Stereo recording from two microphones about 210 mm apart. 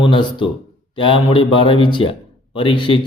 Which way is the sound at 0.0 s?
25° left (ahead or behind).